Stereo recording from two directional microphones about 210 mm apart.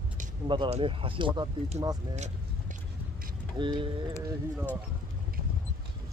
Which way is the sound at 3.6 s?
25° right (ahead or behind).